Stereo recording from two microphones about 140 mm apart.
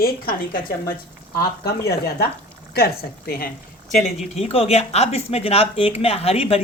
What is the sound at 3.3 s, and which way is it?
Speech, 90° left.